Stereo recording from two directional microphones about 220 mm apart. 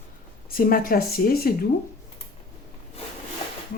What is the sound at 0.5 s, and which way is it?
Speech, 40° left (ahead or behind).